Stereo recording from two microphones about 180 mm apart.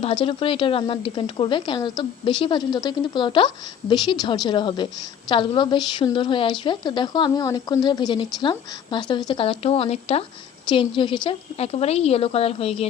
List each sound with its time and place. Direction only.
0.0 s a woman's voice: 30° left (ahead or behind)